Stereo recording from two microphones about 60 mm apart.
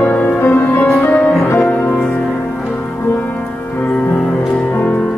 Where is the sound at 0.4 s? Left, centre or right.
Left.